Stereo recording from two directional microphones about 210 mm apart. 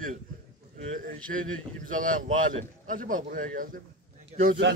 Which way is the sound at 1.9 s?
40° right (ahead or behind).